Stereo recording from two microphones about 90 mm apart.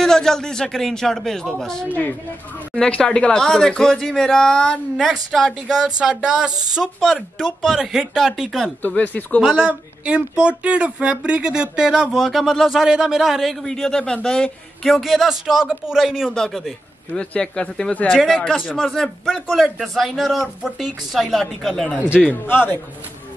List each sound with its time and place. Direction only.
0.0 s speech: 5° left (ahead or behind)
1.9 s a man's voice: 20° left (ahead or behind); by 5.9 s 5° right (ahead or behind)
5.9 s music: 5° right (ahead or behind)
6.7 s speech: 5° right (ahead or behind)
8.6 s speech: 20° left (ahead or behind)
9.4 s a man's voice: 10° right (ahead or behind)
22.2 s a man's voice: 20° left (ahead or behind)